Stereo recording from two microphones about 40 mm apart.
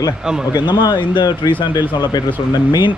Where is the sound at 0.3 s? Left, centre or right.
Centre.